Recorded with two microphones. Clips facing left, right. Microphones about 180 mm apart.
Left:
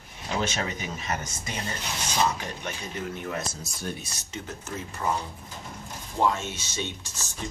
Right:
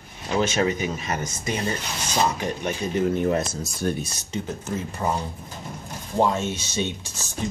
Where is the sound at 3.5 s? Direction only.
65° right (ahead or behind).